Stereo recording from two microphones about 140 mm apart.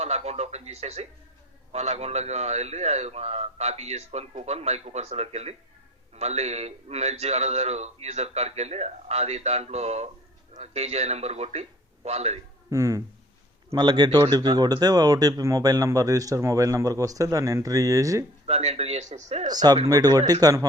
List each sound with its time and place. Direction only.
0.0 s a man's voice: 50° right (ahead or behind)
12.7 s speech: 20° right (ahead or behind)
18.4 s a man's voice: 50° right (ahead or behind)
19.5 s speech: 30° right (ahead or behind)